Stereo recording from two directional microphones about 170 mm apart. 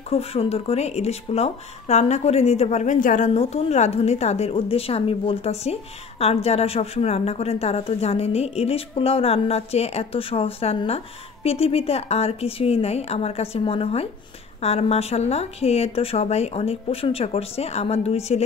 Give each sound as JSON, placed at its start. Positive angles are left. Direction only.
{"t": 0.1, "sound": "a woman's voice", "side_deg": 35}
{"t": 3.3, "sound": "a woman's voice", "side_deg": 35}